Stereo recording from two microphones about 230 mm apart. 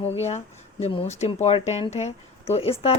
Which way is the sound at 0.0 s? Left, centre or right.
Left.